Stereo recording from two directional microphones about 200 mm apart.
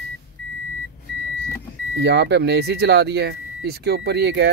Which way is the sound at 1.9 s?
60° right (ahead or behind).